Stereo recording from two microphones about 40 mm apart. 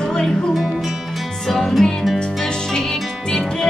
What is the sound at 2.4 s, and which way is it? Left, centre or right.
Music, centre.